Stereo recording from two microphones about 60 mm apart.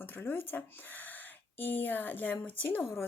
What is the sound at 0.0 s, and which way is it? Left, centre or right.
Speech, left.